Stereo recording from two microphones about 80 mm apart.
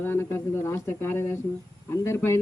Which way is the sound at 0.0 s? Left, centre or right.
Left.